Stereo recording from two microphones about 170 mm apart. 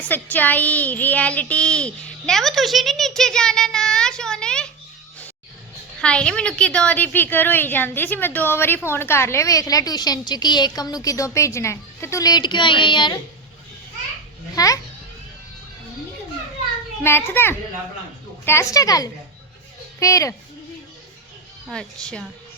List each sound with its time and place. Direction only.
0.0 s speech: 10° left (ahead or behind)
6.0 s a woman's voice: 5° left (ahead or behind); by 13.1 s 25° left (ahead or behind)
14.5 s a child's voice: 20° left (ahead or behind)
17.0 s a woman's voice: 10° left (ahead or behind)
21.7 s speech: 5° left (ahead or behind)